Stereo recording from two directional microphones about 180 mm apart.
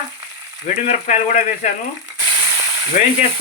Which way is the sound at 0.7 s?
40° left (ahead or behind).